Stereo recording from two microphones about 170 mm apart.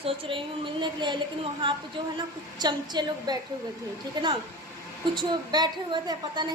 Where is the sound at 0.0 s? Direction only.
35° right (ahead or behind).